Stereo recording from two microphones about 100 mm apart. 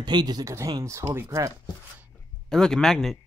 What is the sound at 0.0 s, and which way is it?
Speech, 45° right (ahead or behind).